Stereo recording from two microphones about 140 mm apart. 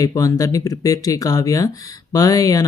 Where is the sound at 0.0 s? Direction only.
25° left (ahead or behind).